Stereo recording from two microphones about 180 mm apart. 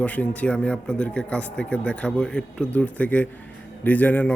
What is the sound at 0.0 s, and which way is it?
Speech, 5° left (ahead or behind).